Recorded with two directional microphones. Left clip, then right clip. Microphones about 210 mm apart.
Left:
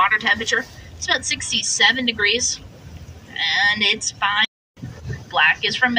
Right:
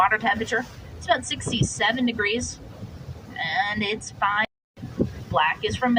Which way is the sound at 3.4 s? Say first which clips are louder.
Left 7 dB; 60° right (ahead or behind).